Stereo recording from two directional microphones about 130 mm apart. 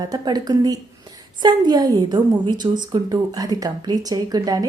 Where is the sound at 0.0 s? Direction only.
30° right (ahead or behind).